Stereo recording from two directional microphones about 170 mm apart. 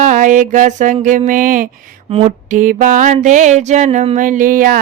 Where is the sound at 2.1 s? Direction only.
35° right (ahead or behind).